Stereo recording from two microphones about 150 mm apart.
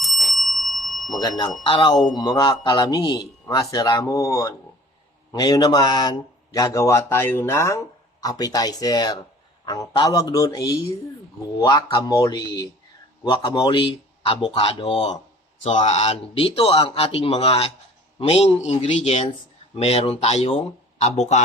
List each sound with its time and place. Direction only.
0.0 s bicycle bell: centre (ahead or behind)
1.6 s a man's voice: 35° left (ahead or behind); by 21.4 s 50° left (ahead or behind)